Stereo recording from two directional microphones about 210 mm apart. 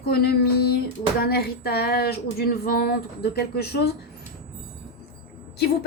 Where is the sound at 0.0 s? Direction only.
50° left (ahead or behind).